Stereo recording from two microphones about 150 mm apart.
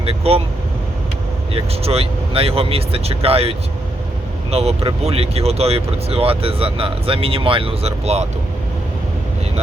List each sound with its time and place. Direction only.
0.0 s speech: 40° right (ahead or behind)
1.5 s speech: 40° right (ahead or behind)
4.5 s speech: 45° right (ahead or behind)